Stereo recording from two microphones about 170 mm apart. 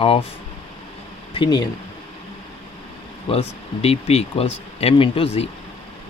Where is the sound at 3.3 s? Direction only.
35° left (ahead or behind).